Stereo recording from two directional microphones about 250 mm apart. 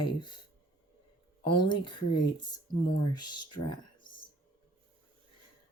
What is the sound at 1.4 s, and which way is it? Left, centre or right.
Speech, centre.